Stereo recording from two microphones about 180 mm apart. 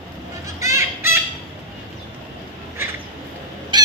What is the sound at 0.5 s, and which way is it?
Fowl, 15° right (ahead or behind).